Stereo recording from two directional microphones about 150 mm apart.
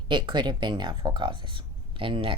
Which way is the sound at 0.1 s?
30° right (ahead or behind).